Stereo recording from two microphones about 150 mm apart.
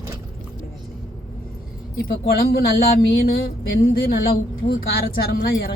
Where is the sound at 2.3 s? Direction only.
90° left.